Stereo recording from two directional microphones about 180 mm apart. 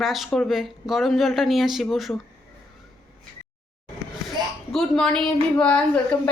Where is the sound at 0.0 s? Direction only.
Centre (ahead or behind).